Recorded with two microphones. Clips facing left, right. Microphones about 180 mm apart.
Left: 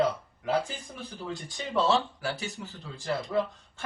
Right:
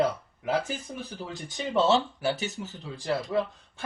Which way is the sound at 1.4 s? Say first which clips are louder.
Right 3 dB; 25° right (ahead or behind).